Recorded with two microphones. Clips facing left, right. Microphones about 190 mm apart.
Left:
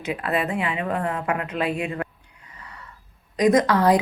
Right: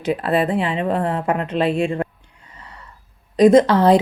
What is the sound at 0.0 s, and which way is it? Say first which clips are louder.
Speech: right 6 dB; 30° right (ahead or behind).